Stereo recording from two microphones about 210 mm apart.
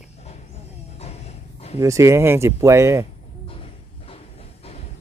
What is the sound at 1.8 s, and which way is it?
Speech, 15° right (ahead or behind).